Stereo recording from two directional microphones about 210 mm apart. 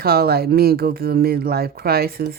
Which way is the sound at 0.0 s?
45° right (ahead or behind).